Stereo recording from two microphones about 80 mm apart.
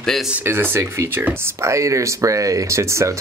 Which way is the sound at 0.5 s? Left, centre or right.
Right.